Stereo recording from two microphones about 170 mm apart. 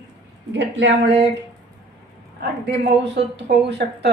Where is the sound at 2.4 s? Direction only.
85° right.